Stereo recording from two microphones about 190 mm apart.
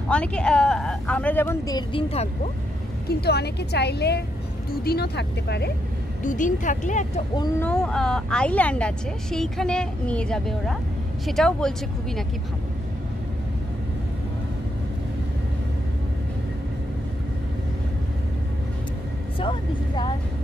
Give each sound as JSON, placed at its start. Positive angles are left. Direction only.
{"t": 0.1, "sound": "speech", "side_deg": 5}
{"t": 3.1, "sound": "a woman's voice", "side_deg": 60}
{"t": 6.2, "sound": "speech", "side_deg": 40}
{"t": 7.6, "sound": "speech", "side_deg": 5}